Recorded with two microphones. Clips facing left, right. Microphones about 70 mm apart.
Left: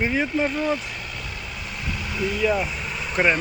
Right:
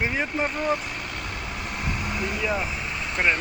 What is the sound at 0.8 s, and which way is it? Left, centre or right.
Vehicle, right.